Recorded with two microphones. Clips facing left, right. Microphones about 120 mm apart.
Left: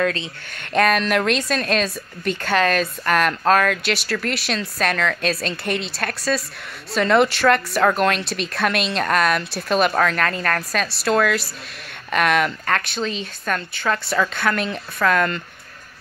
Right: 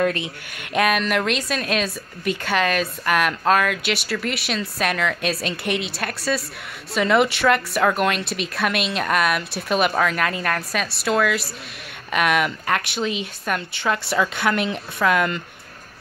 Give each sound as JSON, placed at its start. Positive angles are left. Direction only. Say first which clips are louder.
{"t": 0.0, "sound": "a woman's voice", "louder": "right 1 dB", "side_deg": -15}